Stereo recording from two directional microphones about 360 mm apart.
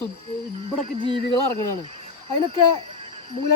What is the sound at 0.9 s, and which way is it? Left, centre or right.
Speech, centre.